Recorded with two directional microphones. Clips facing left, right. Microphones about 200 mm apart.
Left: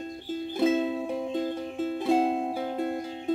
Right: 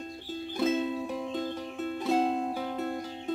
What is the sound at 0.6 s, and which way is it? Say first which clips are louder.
Music: left 3 dB; 25° left (ahead or behind).